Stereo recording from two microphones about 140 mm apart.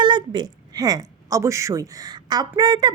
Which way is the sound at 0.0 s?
35° right (ahead or behind).